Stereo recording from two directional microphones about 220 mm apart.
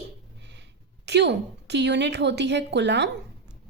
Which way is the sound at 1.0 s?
50° right (ahead or behind).